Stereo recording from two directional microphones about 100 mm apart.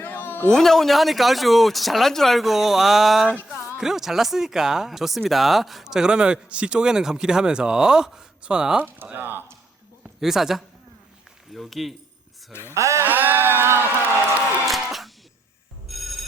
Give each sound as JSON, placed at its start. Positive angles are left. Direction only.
{"t": 0.0, "sound": "a sound", "side_deg": 20}
{"t": 0.4, "sound": "speech", "side_deg": 5}
{"t": 3.2, "sound": "music", "side_deg": 15}
{"t": 3.8, "sound": "speech", "side_deg": -5}
{"t": 9.0, "sound": "speech", "side_deg": -20}
{"t": 10.2, "sound": "speech", "side_deg": -5}
{"t": 12.7, "sound": "a sound", "side_deg": -30}
{"t": 13.1, "sound": "speech", "side_deg": -20}
{"t": 14.6, "sound": "music", "side_deg": 0}
{"t": 15.9, "sound": "ringtone", "side_deg": 0}